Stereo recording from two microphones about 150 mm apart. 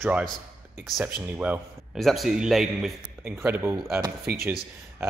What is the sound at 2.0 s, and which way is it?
Speech, centre (ahead or behind).